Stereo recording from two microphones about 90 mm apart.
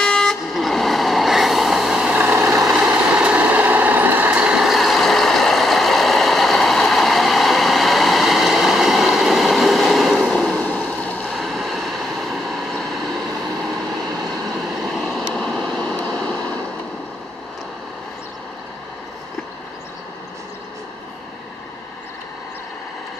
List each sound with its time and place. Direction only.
0.0 s vehicle: 5° left (ahead or behind)
10.9 s a sound: 15° left (ahead or behind)
11.2 s vehicle: centre (ahead or behind)
15.0 s vehicle: centre (ahead or behind)